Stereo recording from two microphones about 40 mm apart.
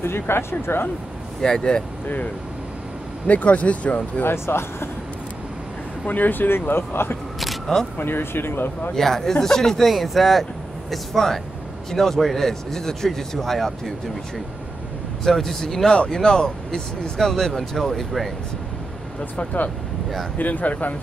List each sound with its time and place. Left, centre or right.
0.0 s speech: left
1.4 s speech: centre
3.3 s speech: left
4.3 s speech: left
6.0 s speech: left
7.3 s single-lens reflex camera: centre
8.0 s speech: left
8.9 s speech: centre
15.2 s speech: centre
20.3 s speech: left